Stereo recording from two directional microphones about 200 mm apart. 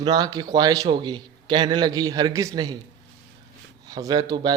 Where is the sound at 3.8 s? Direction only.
20° right (ahead or behind).